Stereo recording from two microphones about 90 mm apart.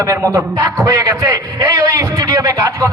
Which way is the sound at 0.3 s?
40° right (ahead or behind).